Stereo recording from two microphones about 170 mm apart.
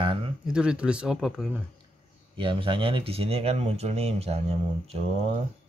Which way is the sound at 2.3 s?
30° right (ahead or behind).